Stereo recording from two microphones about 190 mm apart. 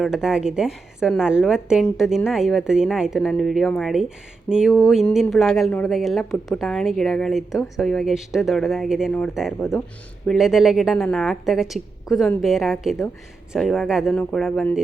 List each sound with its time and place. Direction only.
0.0 s speech: 5° right (ahead or behind)